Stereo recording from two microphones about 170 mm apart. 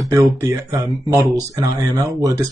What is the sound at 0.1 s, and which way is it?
Speech, 15° right (ahead or behind).